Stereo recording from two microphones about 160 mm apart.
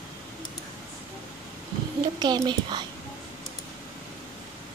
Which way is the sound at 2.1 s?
25° right (ahead or behind).